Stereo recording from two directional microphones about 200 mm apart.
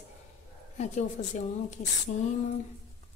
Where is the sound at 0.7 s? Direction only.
35° left (ahead or behind).